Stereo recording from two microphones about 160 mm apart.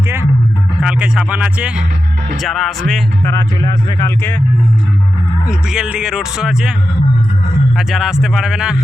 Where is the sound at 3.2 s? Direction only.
20° left (ahead or behind).